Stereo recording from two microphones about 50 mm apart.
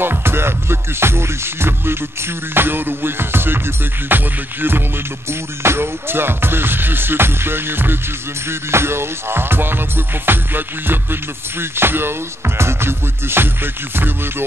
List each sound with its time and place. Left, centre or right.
0.0 s music: right
5.3 s music: right
8.5 s music: right